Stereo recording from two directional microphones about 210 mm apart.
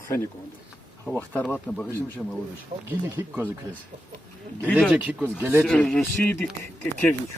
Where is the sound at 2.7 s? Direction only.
25° right (ahead or behind).